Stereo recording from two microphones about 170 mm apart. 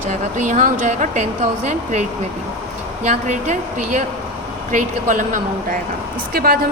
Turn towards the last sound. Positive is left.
turn(degrees=-60)  # may be behind; listen again after turning